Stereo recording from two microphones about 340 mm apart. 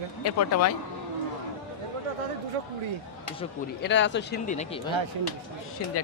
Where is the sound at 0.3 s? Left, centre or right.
Left.